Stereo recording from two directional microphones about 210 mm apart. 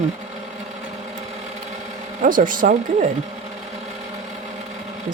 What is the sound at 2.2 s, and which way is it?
Speech, 40° right (ahead or behind).